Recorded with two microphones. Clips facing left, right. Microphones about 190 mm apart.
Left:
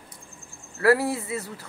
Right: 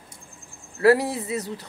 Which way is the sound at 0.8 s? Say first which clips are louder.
Right 2 dB; 20° right (ahead or behind).